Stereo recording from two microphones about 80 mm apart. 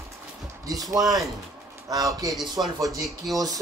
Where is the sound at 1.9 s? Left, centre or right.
Right.